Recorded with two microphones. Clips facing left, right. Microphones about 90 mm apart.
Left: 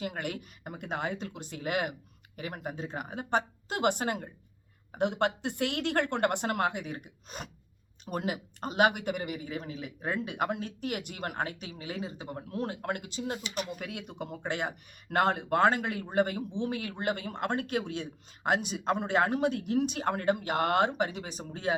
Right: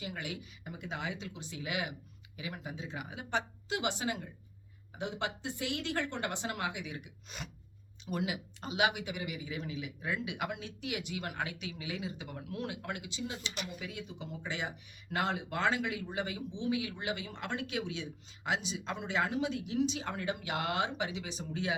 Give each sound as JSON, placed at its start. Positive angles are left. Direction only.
{"t": 0.0, "sound": "a woman's voice", "side_deg": 55}